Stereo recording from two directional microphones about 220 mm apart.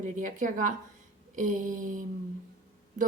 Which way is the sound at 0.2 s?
35° right (ahead or behind).